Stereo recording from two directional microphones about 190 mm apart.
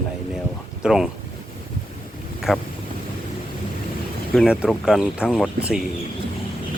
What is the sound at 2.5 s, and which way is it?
Speech, 5° right (ahead or behind).